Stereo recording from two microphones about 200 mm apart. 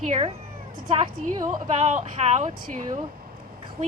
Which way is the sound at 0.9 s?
20° right (ahead or behind).